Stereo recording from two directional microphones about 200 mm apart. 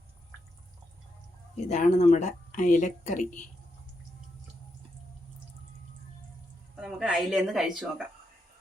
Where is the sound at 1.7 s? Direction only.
35° left (ahead or behind).